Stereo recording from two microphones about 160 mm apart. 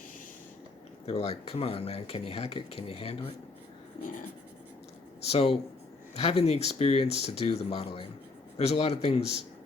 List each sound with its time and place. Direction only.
1.0 s speech: 40° left (ahead or behind)
5.2 s speech: 40° left (ahead or behind)